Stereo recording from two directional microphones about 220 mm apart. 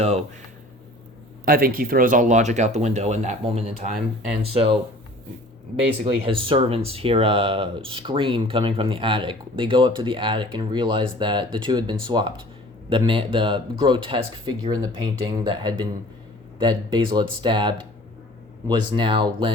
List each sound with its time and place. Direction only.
1.5 s speech: 40° right (ahead or behind)
6.2 s speech: 25° right (ahead or behind)